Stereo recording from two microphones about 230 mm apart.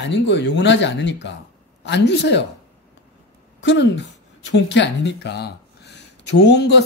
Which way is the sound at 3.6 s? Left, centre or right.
Left.